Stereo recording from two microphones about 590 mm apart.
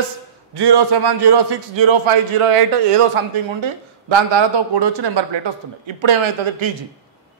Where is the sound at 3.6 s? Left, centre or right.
Right.